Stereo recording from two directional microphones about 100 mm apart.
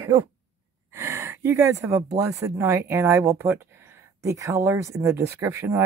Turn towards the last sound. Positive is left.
turn(degrees=-25)  # may be behind; listen again after turning